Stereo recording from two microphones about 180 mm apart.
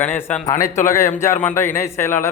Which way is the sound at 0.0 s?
10° left (ahead or behind).